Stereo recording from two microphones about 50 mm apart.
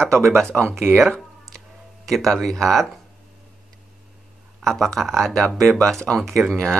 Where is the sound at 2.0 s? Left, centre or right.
Centre.